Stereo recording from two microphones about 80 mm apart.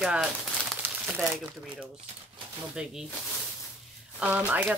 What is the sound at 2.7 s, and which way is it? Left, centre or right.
Speech, centre.